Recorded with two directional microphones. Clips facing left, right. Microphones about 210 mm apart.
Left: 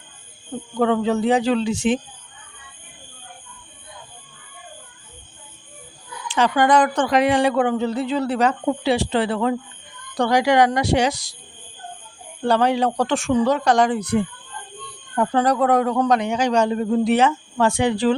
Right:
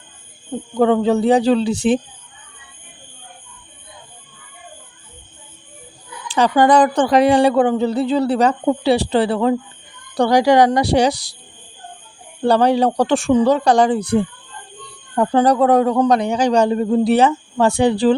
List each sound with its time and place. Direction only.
0.7 s speech: 35° right (ahead or behind)
6.2 s speech: 35° right (ahead or behind)
12.5 s speech: 35° right (ahead or behind)